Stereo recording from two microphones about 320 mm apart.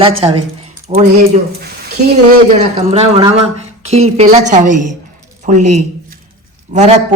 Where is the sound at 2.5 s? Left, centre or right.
Right.